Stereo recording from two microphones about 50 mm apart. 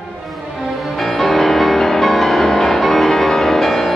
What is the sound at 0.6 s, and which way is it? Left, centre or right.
Music, centre.